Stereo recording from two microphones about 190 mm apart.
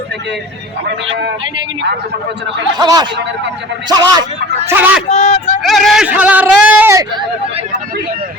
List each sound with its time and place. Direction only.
2.7 s a man's voice: 20° right (ahead or behind)
4.7 s speech: 10° right (ahead or behind)
5.0 s speech: 35° left (ahead or behind)
5.6 s a sound: centre (ahead or behind)